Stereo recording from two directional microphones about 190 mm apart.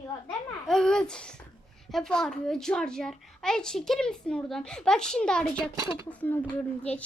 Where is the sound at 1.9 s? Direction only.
5° left (ahead or behind).